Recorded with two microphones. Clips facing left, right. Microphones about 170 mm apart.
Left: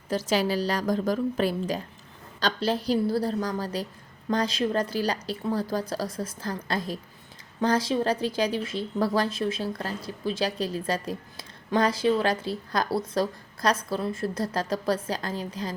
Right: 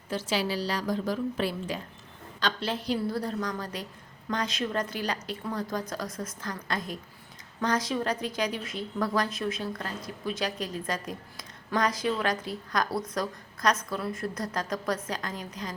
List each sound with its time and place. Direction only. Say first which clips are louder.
0.1 s a woman's voice: left 4 dB; 40° left (ahead or behind)